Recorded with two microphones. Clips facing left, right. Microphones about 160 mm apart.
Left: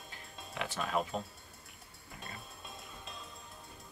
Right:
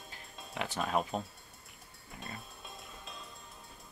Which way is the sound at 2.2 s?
Centre (ahead or behind).